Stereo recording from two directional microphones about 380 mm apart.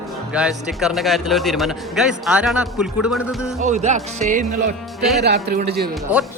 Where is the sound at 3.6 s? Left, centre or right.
Centre.